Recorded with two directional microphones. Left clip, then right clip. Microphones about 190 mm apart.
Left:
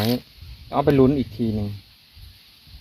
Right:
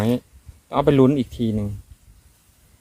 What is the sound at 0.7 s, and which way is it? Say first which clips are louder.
Speech: right 1 dB; 25° right (ahead or behind).